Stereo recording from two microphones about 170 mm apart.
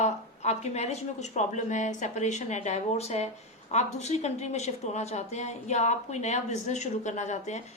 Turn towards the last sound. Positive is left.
turn(degrees=45)  # may be behind; listen again after turning